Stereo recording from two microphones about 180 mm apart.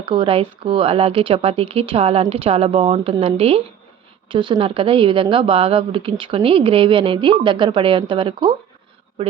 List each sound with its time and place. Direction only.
0.0 s a woman's voice: 25° right (ahead or behind)